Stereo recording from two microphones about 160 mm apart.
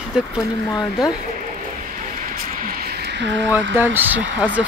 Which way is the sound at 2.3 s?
65° right (ahead or behind).